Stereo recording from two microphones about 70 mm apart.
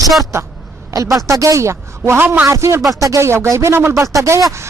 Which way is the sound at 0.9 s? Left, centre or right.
Right.